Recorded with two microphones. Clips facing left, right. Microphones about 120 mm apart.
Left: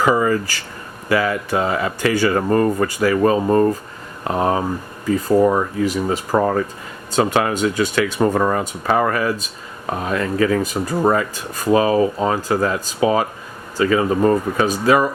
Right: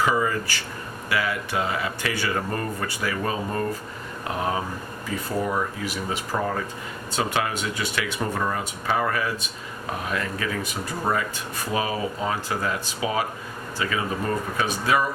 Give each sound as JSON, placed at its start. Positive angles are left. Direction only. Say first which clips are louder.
{"t": 0.0, "sound": "speech", "louder": "left 6 dB", "side_deg": 45}
{"t": 5.4, "sound": "speech", "louder": "left 10 dB", "side_deg": 55}
{"t": 10.1, "sound": "speech", "louder": "left 12 dB", "side_deg": 40}